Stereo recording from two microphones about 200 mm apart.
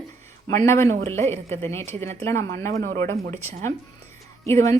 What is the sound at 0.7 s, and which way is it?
Speech, 15° left (ahead or behind).